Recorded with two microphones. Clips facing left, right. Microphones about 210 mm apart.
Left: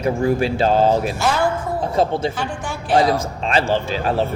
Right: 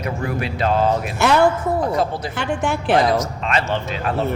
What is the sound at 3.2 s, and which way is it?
Speech, 30° left (ahead or behind).